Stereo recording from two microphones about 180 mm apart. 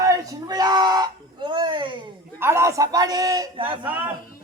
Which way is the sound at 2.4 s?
15° right (ahead or behind).